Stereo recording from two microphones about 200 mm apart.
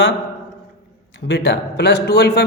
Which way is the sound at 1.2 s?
60° left (ahead or behind).